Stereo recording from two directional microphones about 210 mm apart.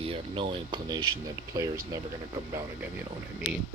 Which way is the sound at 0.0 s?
25° right (ahead or behind).